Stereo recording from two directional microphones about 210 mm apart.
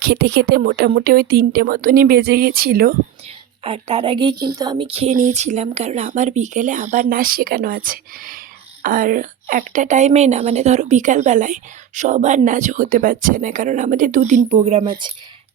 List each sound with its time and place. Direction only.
0.0 s a woman's voice: 50° right (ahead or behind)
3.2 s speech: 25° right (ahead or behind)